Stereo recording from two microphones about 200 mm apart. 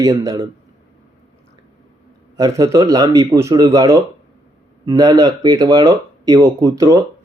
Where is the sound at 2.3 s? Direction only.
15° right (ahead or behind).